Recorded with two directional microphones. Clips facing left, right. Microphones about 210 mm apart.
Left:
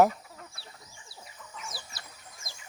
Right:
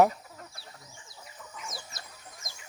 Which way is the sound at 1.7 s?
30° left (ahead or behind).